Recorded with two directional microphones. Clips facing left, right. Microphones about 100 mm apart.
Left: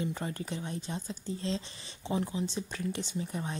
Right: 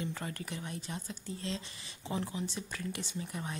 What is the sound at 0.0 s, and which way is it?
A woman's voice, 25° left (ahead or behind).